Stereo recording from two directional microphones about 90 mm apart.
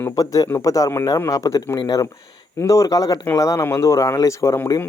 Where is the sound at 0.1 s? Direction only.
40° left (ahead or behind).